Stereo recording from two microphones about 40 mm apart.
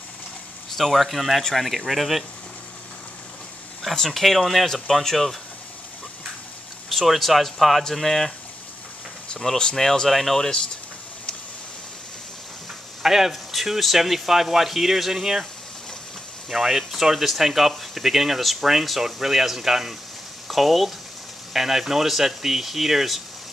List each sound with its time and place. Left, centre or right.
0.7 s speech: centre
3.9 s speech: centre
6.9 s speech: centre
9.3 s speech: left
9.8 s speech: centre
13.0 s speech: centre
16.4 s speech: centre